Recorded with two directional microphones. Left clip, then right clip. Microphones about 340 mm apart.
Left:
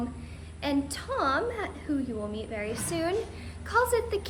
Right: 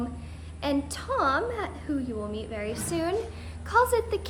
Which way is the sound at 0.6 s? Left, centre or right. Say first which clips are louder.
Right 1 dB; centre.